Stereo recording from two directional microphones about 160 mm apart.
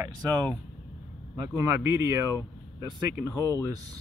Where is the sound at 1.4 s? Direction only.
20° right (ahead or behind).